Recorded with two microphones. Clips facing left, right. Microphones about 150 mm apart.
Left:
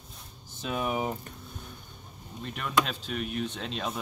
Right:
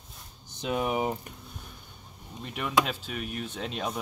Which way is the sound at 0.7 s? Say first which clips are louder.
Right 2 dB; 10° right (ahead or behind).